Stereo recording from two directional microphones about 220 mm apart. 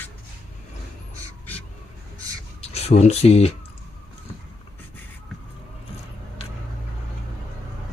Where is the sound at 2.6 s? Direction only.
30° left (ahead or behind).